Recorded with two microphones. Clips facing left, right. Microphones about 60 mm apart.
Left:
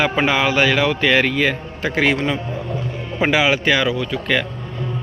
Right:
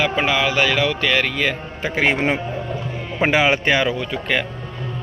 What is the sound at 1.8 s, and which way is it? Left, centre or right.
Speech, centre.